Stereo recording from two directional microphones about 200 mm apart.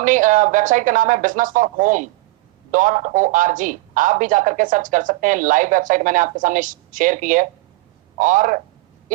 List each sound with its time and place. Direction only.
0.0 s speech: 40° right (ahead or behind)